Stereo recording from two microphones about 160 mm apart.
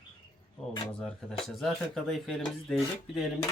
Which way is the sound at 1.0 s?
Centre (ahead or behind).